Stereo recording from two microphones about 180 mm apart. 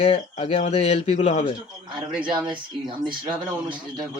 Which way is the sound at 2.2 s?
25° right (ahead or behind).